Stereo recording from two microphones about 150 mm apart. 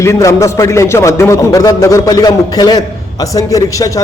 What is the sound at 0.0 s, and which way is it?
A man's voice, 20° left (ahead or behind).